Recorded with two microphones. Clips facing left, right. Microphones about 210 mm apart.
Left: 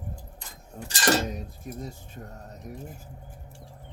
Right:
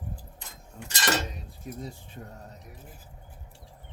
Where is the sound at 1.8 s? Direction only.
45° left (ahead or behind).